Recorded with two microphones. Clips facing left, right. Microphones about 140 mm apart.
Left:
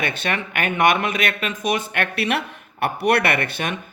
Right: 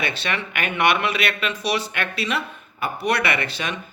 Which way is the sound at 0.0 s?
50° left (ahead or behind).